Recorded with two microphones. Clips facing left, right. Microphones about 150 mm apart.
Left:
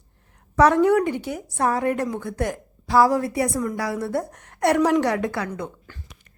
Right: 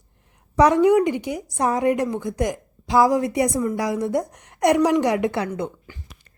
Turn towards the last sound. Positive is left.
turn(degrees=-20)  # may be behind; listen again after turning